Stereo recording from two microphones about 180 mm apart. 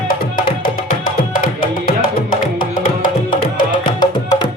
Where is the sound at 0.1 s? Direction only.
55° left (ahead or behind).